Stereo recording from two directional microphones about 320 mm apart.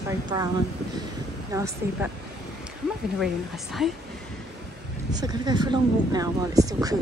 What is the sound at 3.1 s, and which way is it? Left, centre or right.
Speech, centre.